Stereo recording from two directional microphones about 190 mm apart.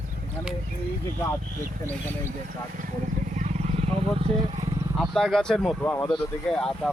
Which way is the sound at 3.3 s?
35° right (ahead or behind).